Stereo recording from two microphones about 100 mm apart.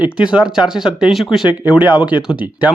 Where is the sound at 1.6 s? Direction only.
15° right (ahead or behind).